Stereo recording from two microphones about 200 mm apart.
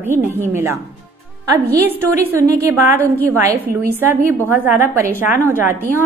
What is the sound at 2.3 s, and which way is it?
A woman's voice, 15° right (ahead or behind).